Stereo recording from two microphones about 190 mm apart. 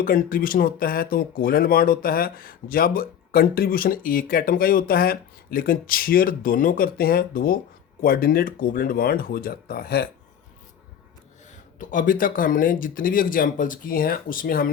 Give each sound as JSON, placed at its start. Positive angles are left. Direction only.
{"t": 0.0, "sound": "speech", "side_deg": 50}
{"t": 11.5, "sound": "speech", "side_deg": 45}